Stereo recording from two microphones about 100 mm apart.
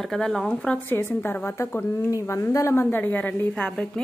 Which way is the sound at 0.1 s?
5° left (ahead or behind).